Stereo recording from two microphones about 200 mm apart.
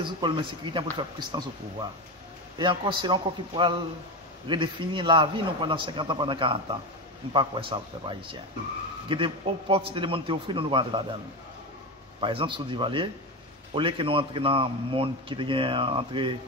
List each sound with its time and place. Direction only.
0.0 s a man's voice: 25° right (ahead or behind)
12.2 s a man's voice: 25° right (ahead or behind)